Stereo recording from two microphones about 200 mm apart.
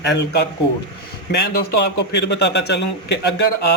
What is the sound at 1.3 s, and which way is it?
A man's voice, 55° left (ahead or behind).